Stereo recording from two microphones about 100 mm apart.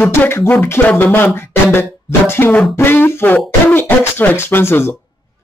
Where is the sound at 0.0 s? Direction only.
20° left (ahead or behind).